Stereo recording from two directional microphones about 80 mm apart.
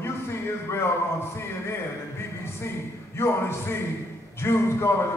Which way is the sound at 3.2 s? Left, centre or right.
Left.